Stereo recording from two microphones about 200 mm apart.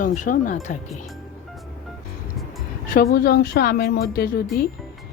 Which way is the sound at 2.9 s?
45° left (ahead or behind).